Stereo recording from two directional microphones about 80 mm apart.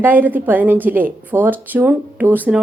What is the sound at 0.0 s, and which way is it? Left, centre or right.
A woman's voice, right.